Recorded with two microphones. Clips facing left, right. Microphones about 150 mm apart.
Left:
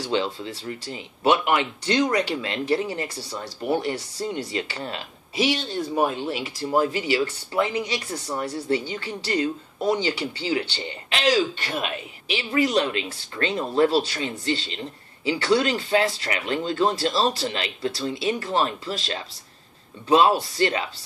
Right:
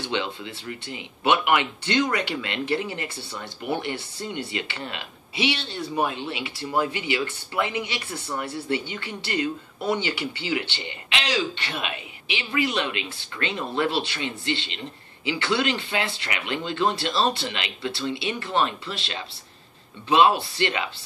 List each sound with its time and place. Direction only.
0.0 s speech: 40° left (ahead or behind)